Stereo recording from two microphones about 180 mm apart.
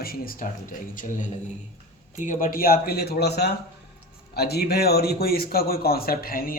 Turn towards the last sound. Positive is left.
turn(degrees=55)  # may be behind; listen again after turning